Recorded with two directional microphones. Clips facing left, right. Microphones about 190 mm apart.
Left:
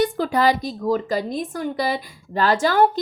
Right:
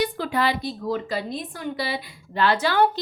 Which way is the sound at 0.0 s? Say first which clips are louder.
Left 5 dB; 45° left (ahead or behind).